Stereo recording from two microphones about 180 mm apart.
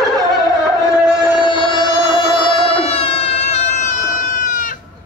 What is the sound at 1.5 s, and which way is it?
Music, 25° left (ahead or behind).